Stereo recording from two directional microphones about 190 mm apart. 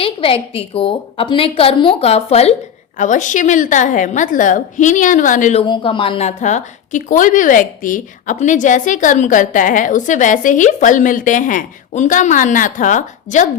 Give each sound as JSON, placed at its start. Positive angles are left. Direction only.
{"t": 0.0, "sound": "a woman's voice", "side_deg": 30}
{"t": 5.6, "sound": "a woman's voice", "side_deg": 25}